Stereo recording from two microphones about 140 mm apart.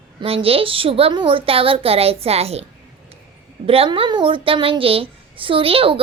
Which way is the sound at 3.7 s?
40° right (ahead or behind).